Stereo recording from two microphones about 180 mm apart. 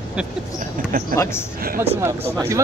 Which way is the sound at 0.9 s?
50° right (ahead or behind).